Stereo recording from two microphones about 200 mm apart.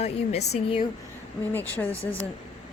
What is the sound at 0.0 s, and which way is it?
Speech, 30° left (ahead or behind).